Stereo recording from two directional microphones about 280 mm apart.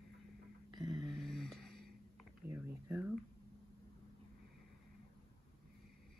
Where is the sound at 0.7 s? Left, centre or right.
Centre.